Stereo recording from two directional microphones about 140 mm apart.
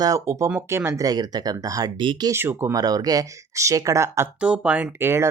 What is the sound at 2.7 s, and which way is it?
Speech, 25° right (ahead or behind).